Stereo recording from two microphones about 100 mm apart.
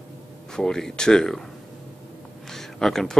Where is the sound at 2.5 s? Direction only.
5° left (ahead or behind).